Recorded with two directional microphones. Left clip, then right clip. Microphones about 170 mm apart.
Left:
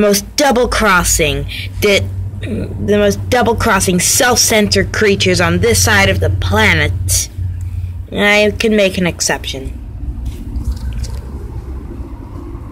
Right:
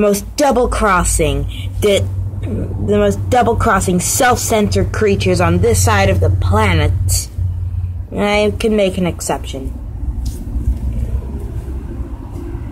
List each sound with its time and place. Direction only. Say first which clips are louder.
0.6 s speech: left 2 dB; 25° left (ahead or behind)